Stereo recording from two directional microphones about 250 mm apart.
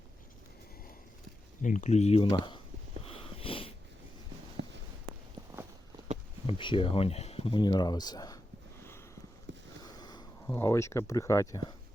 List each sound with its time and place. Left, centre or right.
1.6 s speech: left
3.0 s sniff: left
4.6 s a sound: right
6.5 s speech: centre
9.5 s a sound: right
9.8 s speech: centre